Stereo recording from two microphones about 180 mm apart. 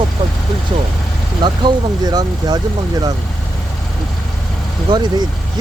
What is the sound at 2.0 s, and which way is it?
Speech, 20° right (ahead or behind).